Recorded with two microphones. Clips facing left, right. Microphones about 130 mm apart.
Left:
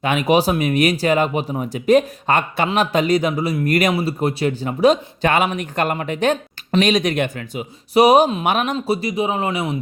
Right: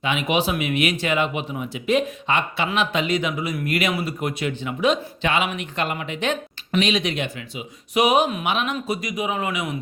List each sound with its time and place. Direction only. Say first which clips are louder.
0.0 s speech: left 6 dB; 45° left (ahead or behind)
3.9 s speech: left 6 dB; 30° left (ahead or behind)
8.4 s speech: left 5 dB; 45° left (ahead or behind)
8.7 s speech: left 6 dB; 30° left (ahead or behind)